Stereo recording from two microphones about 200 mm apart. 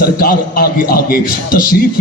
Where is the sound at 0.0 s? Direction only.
45° left (ahead or behind).